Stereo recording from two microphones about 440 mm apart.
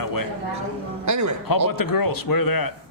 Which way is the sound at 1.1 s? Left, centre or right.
Right.